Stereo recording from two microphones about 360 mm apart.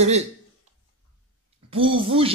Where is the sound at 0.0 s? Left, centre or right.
Centre.